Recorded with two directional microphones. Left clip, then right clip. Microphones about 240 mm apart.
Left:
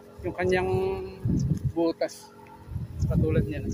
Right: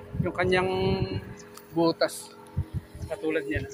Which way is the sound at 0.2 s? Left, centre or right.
Centre.